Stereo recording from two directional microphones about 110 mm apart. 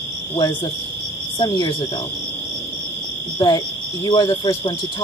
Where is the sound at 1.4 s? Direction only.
40° left (ahead or behind).